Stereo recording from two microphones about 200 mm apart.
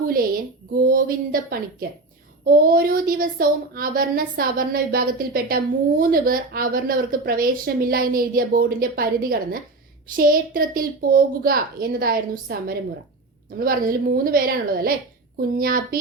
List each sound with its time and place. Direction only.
0.7 s a woman's voice: 45° right (ahead or behind)